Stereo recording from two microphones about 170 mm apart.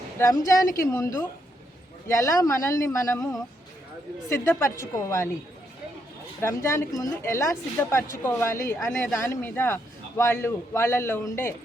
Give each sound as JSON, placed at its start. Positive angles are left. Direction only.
{"t": 0.2, "sound": "a woman's voice", "side_deg": 20}
{"t": 6.4, "sound": "a man's voice", "side_deg": 15}